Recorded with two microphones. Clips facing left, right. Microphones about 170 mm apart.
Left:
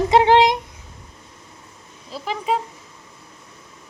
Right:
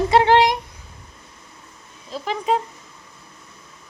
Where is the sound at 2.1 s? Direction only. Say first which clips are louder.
Right 1 dB; 5° left (ahead or behind).